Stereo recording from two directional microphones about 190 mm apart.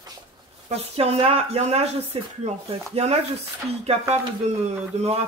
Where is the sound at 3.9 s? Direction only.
30° right (ahead or behind).